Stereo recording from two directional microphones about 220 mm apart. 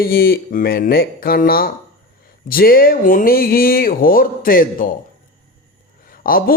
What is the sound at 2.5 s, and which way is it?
Music, 40° left (ahead or behind).